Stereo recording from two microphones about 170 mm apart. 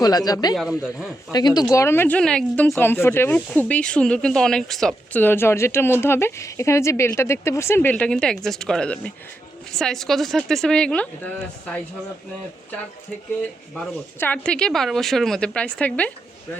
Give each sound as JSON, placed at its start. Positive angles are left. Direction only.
{"t": 0.0, "sound": "speech", "side_deg": 20}
{"t": 0.5, "sound": "speech", "side_deg": 0}
{"t": 1.3, "sound": "speech", "side_deg": 25}
{"t": 13.7, "sound": "speech", "side_deg": 10}